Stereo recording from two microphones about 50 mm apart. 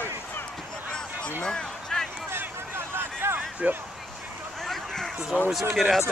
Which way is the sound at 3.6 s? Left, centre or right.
Right.